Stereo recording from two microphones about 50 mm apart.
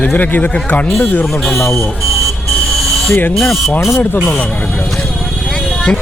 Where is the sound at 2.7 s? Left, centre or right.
Centre.